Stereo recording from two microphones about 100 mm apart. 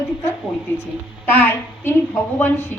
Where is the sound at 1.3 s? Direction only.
20° left (ahead or behind).